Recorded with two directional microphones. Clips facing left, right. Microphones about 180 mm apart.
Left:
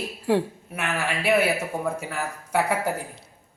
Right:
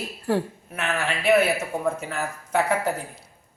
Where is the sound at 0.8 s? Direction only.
10° left (ahead or behind).